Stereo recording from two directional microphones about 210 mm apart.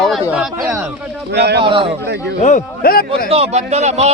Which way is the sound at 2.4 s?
40° left (ahead or behind).